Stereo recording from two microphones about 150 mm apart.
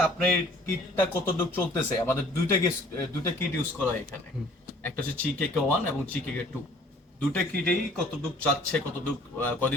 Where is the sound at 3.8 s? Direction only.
10° left (ahead or behind).